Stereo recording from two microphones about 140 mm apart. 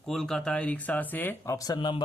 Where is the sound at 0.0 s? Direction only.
Centre (ahead or behind).